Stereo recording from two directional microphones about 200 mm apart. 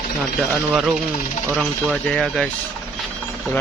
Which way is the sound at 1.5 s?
Centre (ahead or behind).